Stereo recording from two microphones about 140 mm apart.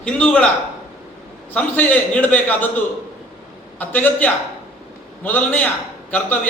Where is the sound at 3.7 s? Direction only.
10° left (ahead or behind).